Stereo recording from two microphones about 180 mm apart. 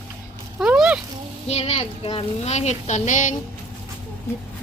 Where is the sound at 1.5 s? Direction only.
35° left (ahead or behind).